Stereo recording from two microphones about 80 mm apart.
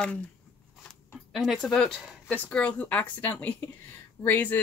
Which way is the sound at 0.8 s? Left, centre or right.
Centre.